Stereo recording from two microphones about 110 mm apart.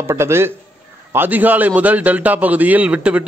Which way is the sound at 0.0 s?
25° right (ahead or behind).